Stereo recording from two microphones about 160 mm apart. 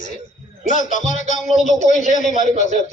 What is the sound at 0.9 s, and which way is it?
A man's voice, 50° left (ahead or behind).